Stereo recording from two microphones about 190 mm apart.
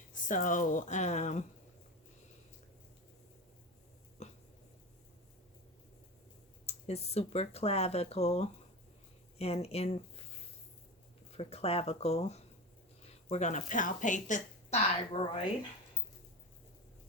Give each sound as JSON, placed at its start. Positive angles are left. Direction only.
{"t": 0.1, "sound": "speech", "side_deg": 45}
{"t": 4.2, "sound": "a sound", "side_deg": 40}
{"t": 6.7, "sound": "speech", "side_deg": 35}
{"t": 15.1, "sound": "speech", "side_deg": 30}